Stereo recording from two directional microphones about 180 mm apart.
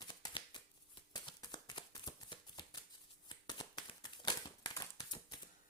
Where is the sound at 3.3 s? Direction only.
25° left (ahead or behind).